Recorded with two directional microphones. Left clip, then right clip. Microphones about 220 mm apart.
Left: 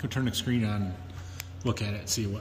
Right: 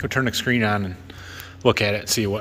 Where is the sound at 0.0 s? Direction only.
Centre (ahead or behind).